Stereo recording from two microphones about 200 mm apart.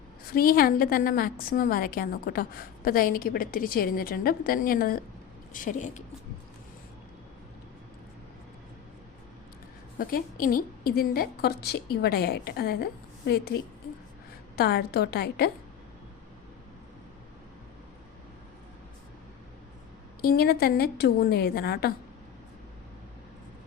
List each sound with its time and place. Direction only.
0.3 s a woman's voice: 50° left (ahead or behind)
10.0 s a woman's voice: 45° left (ahead or behind)
20.2 s a woman's voice: 50° left (ahead or behind)